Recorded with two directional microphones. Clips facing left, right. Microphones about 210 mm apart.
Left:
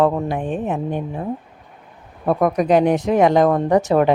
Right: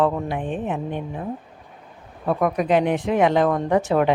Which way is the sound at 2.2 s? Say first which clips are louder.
Left 4 dB; 40° left (ahead or behind).